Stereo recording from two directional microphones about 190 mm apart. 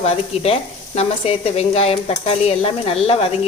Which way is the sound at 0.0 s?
30° left (ahead or behind).